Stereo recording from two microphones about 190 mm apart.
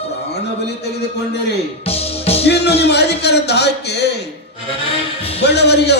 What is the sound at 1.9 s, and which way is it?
Music, 30° left (ahead or behind).